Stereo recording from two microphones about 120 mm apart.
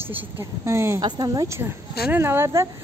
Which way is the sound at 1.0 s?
35° right (ahead or behind).